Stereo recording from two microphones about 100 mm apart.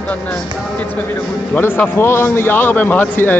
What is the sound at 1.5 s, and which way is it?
Speech, 20° left (ahead or behind).